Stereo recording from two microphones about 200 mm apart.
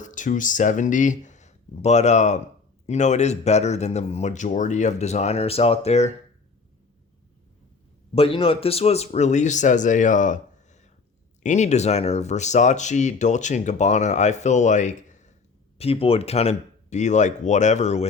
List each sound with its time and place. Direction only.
0.0 s speech: 40° left (ahead or behind)
8.1 s speech: 30° left (ahead or behind)